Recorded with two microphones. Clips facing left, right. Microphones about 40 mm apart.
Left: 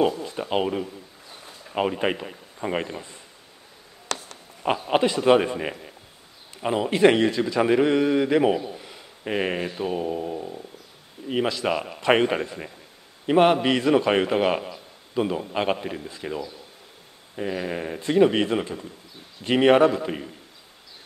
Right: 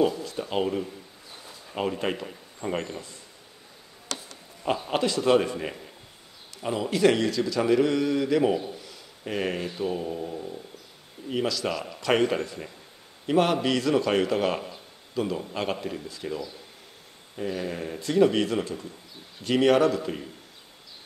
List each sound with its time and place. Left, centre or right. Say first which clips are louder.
0.1 s a man's voice: left 3 dB; left
4.1 s a sound: left 5 dB; left
4.8 s a man's voice: left 5 dB; left